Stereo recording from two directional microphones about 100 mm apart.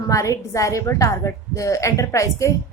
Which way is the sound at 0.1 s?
35° left (ahead or behind).